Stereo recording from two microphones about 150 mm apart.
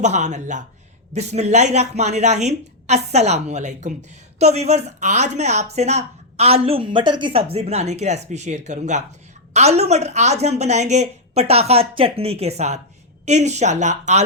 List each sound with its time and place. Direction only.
0.0 s speech: 50° right (ahead or behind)